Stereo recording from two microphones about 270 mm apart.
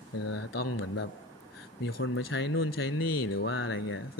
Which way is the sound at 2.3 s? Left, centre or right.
Left.